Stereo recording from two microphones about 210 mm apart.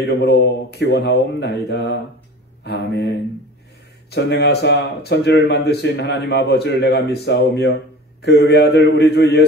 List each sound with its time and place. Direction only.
0.0 s speech: 50° left (ahead or behind)